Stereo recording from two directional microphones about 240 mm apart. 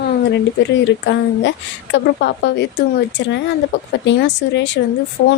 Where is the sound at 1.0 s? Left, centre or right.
Left.